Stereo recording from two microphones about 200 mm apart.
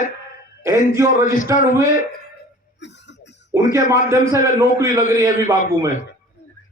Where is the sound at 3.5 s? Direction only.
15° right (ahead or behind).